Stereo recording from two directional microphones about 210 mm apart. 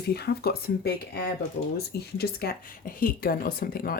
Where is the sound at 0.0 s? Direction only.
50° left (ahead or behind).